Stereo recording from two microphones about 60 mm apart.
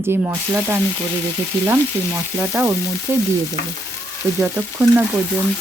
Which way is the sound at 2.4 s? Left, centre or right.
Right.